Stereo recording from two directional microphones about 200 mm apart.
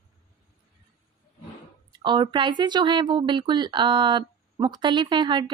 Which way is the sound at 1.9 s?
25° right (ahead or behind).